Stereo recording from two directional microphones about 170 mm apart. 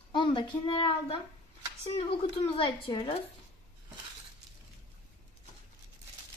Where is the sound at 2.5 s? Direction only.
30° left (ahead or behind).